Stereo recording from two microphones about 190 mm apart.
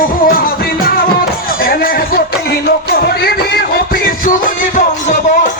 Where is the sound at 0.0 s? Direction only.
50° left (ahead or behind).